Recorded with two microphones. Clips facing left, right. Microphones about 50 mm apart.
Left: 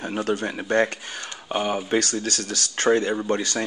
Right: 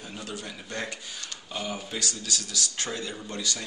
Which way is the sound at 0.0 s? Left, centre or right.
Left.